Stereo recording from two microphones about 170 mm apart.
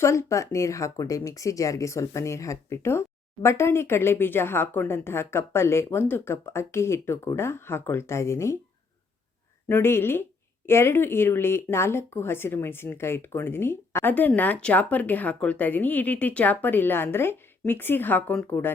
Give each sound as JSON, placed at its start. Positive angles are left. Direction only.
{"t": 0.0, "sound": "speech", "side_deg": 15}
{"t": 9.6, "sound": "speech", "side_deg": 15}